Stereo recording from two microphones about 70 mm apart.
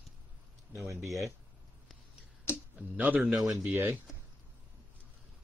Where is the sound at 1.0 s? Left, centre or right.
Centre.